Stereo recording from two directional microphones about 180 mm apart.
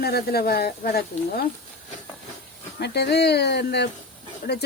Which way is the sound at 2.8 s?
70° left (ahead or behind).